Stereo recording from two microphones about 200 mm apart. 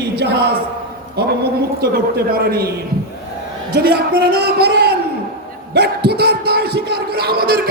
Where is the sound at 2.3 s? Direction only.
50° right (ahead or behind).